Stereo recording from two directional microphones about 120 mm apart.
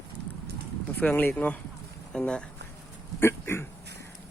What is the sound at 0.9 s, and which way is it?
Speech, 15° left (ahead or behind).